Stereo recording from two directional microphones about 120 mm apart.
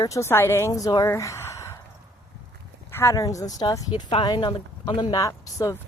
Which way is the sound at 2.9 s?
20° left (ahead or behind).